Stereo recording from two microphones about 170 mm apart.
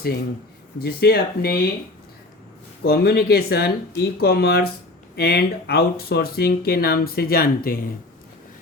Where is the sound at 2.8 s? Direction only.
65° left (ahead or behind).